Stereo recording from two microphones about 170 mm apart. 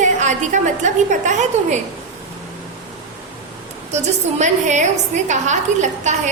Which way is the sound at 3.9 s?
40° right (ahead or behind).